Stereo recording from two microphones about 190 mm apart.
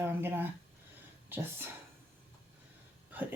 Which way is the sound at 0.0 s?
10° right (ahead or behind).